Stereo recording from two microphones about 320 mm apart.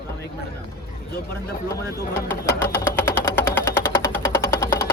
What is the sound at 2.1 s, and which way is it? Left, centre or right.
Music, centre.